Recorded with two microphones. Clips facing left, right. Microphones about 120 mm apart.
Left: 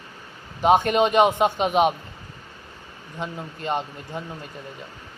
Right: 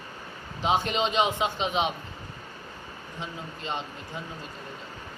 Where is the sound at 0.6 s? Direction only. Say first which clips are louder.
Left 8 dB; 55° left (ahead or behind).